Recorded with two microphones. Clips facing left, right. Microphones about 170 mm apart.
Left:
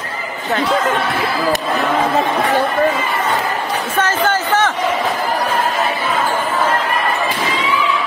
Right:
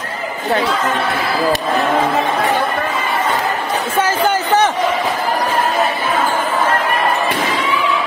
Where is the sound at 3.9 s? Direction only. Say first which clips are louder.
Right 1 dB; 10° right (ahead or behind).